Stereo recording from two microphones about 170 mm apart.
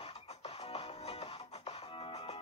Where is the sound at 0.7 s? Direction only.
35° left (ahead or behind).